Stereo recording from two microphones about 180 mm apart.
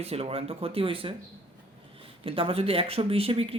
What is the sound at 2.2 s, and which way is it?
Speech, 30° right (ahead or behind).